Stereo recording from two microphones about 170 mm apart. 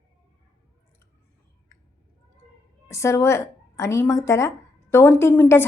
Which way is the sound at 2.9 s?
15° left (ahead or behind).